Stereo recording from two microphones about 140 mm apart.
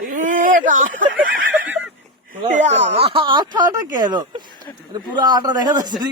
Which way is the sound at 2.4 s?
60° right (ahead or behind).